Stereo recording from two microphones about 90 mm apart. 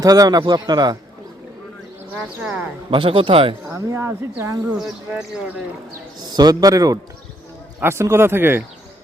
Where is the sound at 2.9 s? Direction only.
80° right.